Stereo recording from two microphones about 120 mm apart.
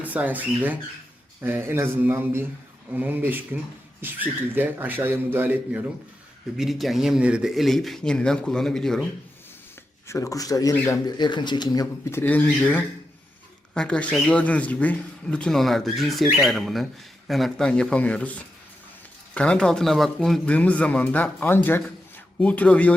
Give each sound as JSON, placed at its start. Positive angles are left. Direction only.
{"t": 0.0, "sound": "a man's voice", "side_deg": -15}
{"t": 6.6, "sound": "speech", "side_deg": 0}
{"t": 10.1, "sound": "speech", "side_deg": 25}
{"t": 12.1, "sound": "a man's voice", "side_deg": 15}